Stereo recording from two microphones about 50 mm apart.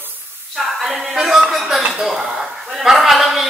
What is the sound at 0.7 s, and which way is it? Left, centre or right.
Music, centre.